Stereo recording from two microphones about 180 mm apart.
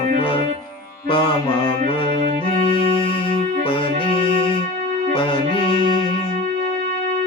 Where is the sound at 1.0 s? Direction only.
25° left (ahead or behind).